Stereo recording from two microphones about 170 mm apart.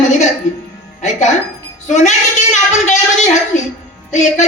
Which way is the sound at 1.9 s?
45° left (ahead or behind).